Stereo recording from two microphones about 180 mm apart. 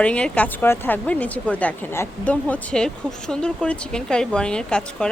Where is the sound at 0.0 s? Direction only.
5° left (ahead or behind).